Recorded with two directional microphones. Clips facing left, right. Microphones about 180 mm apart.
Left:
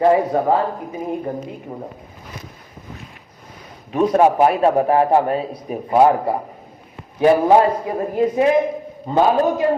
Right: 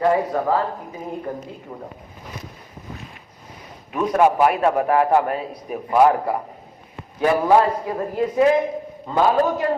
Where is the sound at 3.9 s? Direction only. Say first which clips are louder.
Left 3 dB; 30° left (ahead or behind).